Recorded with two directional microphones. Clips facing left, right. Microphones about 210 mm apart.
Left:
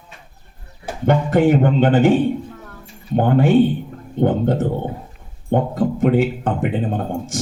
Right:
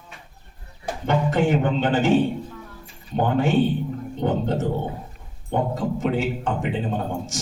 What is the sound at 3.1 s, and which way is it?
A man's voice, 55° left (ahead or behind).